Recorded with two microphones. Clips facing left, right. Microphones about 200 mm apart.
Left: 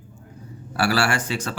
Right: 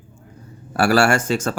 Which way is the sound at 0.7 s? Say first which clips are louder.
Right 6 dB; 45° right (ahead or behind).